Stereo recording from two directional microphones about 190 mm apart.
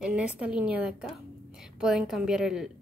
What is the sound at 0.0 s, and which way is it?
A woman's voice, 5° right (ahead or behind).